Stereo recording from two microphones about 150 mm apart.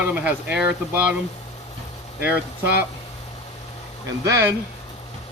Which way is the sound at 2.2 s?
10° right (ahead or behind).